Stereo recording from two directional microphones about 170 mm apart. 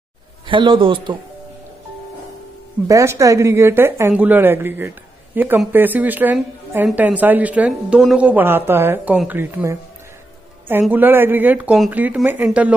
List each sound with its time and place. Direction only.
0.5 s a man's voice: 30° right (ahead or behind)
2.9 s a woman's voice: 20° right (ahead or behind)